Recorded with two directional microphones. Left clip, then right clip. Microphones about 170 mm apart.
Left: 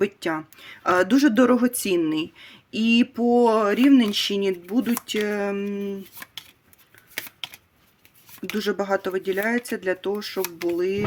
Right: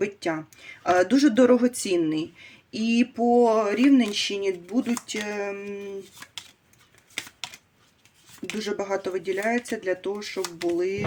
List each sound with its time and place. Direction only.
0.0 s a woman's voice: 40° left (ahead or behind)
8.5 s speech: 45° left (ahead or behind)